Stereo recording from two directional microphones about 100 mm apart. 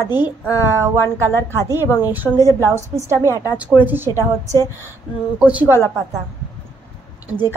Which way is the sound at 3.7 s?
20° right (ahead or behind).